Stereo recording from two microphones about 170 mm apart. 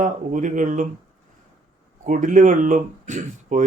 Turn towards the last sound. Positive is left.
turn(degrees=-45)  # may be behind; listen again after turning